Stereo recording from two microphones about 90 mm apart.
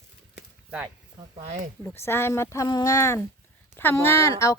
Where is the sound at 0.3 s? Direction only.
10° right (ahead or behind).